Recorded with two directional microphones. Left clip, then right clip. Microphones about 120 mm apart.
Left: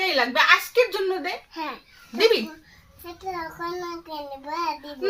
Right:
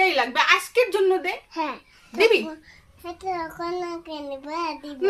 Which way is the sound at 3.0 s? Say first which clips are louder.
Right 3 dB; 40° right (ahead or behind).